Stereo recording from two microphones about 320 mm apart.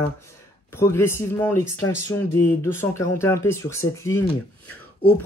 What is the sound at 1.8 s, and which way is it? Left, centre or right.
Speech, left.